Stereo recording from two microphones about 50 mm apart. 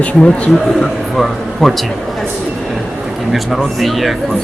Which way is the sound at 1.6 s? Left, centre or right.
Centre.